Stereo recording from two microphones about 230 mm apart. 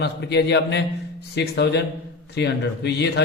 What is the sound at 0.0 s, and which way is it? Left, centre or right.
Speech, left.